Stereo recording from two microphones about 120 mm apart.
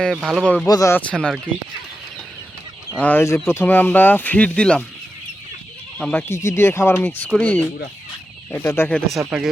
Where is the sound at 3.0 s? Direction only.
15° left (ahead or behind).